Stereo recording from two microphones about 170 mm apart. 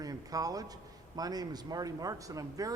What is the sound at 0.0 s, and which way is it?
A man's voice, 20° right (ahead or behind).